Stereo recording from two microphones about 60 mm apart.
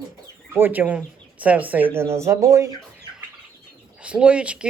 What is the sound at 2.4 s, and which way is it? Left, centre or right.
Speech, right.